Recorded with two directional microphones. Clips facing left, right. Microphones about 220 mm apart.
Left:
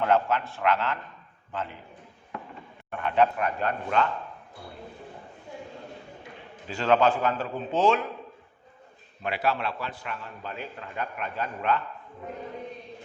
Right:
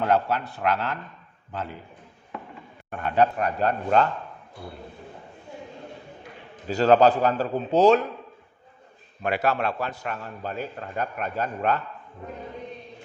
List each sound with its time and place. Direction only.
0.0 s a man's voice: 40° right (ahead or behind)
3.0 s a man's voice: 40° right (ahead or behind)
6.7 s a man's voice: 40° right (ahead or behind)
9.2 s a man's voice: 45° right (ahead or behind)